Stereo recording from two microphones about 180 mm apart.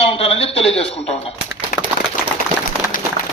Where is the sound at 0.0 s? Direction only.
35° left (ahead or behind).